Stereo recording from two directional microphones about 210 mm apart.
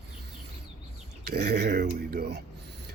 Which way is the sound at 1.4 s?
50° right (ahead or behind).